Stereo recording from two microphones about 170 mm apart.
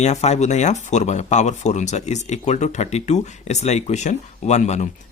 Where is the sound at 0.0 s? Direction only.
40° left (ahead or behind).